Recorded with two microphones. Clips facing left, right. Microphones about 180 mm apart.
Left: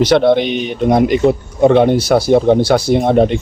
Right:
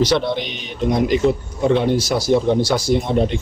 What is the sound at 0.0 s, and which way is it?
Speech, 60° left (ahead or behind).